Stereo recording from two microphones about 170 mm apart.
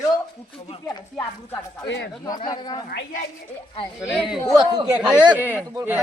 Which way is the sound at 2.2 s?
20° left (ahead or behind).